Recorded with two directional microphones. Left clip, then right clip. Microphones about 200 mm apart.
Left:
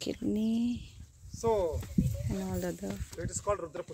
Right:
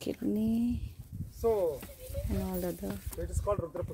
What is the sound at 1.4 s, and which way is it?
Speech, 25° left (ahead or behind).